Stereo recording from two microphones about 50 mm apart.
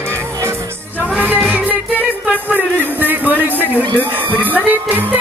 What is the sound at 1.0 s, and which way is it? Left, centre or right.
Music, right.